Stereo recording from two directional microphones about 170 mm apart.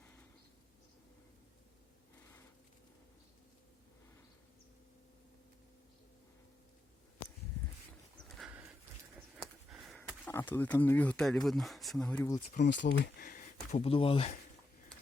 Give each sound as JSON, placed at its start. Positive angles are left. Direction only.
{"t": 8.4, "sound": "dog", "side_deg": -10}
{"t": 9.4, "sound": "sniff", "side_deg": 0}
{"t": 10.2, "sound": "speech", "side_deg": 15}
{"t": 12.6, "sound": "speech", "side_deg": 90}
{"t": 13.9, "sound": "speech", "side_deg": 30}